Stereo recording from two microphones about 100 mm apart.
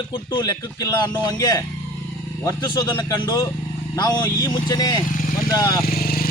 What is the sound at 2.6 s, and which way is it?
Speech, 50° left (ahead or behind).